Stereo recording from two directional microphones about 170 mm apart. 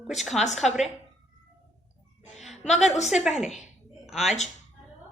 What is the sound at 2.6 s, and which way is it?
Speech, 40° left (ahead or behind).